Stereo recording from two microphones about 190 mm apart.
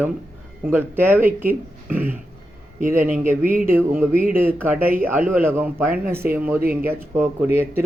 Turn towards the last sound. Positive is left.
turn(degrees=-10)  # may be behind; listen again after turning